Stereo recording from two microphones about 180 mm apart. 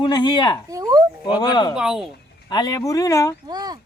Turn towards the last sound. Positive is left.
turn(degrees=-25)  # may be behind; listen again after turning